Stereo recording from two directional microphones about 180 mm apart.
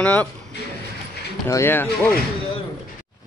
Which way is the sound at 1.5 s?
15° left (ahead or behind).